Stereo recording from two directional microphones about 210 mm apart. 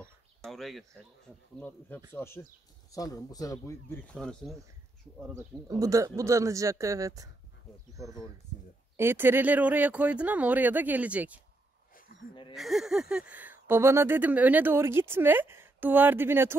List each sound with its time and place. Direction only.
0.4 s speech: centre (ahead or behind)
5.3 s speech: 15° right (ahead or behind)
12.5 s speech: centre (ahead or behind)